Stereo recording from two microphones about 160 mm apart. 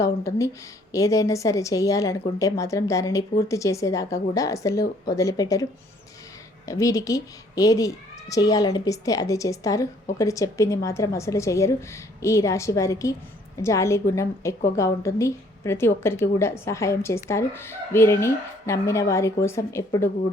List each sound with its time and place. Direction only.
0.0 s a woman's voice: 20° left (ahead or behind)
6.7 s a woman's voice: 20° left (ahead or behind)